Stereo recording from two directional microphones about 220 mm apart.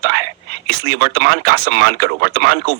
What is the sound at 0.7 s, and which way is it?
Speech, 45° right (ahead or behind).